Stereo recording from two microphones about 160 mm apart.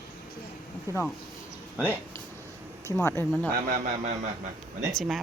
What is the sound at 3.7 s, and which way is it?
Speech, 50° right (ahead or behind).